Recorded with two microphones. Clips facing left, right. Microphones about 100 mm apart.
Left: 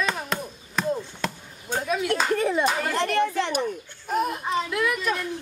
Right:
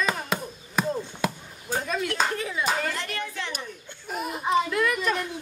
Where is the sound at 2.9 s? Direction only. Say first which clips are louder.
Left 10 dB; 40° left (ahead or behind).